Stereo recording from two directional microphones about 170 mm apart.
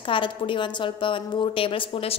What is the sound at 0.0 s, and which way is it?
A woman's voice, 30° left (ahead or behind).